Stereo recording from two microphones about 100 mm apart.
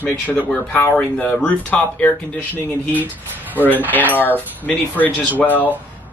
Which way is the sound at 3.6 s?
15° left (ahead or behind).